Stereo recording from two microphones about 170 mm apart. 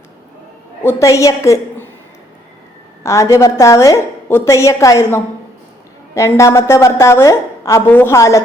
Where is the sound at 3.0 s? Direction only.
15° left (ahead or behind).